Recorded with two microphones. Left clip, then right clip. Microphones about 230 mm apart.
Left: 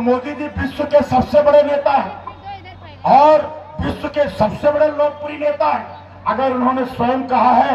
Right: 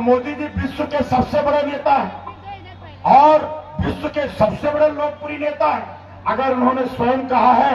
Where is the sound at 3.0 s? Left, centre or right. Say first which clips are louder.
Left 1 dB; left.